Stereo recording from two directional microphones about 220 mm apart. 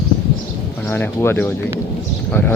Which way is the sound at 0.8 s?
10° left (ahead or behind).